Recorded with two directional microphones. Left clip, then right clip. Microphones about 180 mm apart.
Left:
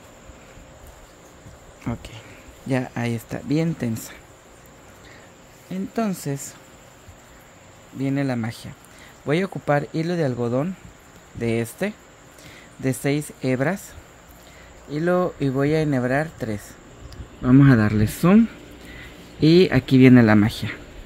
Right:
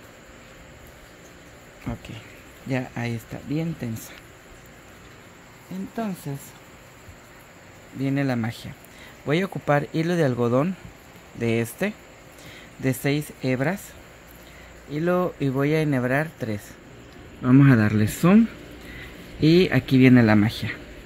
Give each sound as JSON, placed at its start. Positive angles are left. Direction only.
{"t": 1.9, "sound": "a sound", "side_deg": 25}
{"t": 2.7, "sound": "speech", "side_deg": 25}
{"t": 3.4, "sound": "speech", "side_deg": 45}
{"t": 5.9, "sound": "speech", "side_deg": 65}
{"t": 8.0, "sound": "speech", "side_deg": 10}
{"t": 11.3, "sound": "speech", "side_deg": 5}
{"t": 14.9, "sound": "speech", "side_deg": 15}
{"t": 19.4, "sound": "speech", "side_deg": 20}